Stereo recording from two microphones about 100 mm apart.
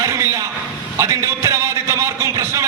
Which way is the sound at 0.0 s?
30° right (ahead or behind).